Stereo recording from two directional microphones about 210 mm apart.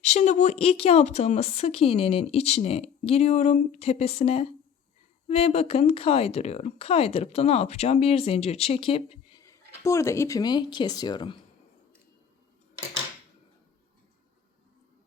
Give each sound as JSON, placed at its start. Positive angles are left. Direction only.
{"t": 0.0, "sound": "a woman's voice", "side_deg": 35}
{"t": 9.4, "sound": "speech", "side_deg": 15}